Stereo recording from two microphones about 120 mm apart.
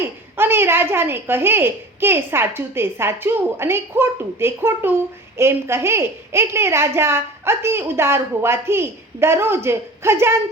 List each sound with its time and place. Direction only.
0.3 s a woman's voice: 20° right (ahead or behind)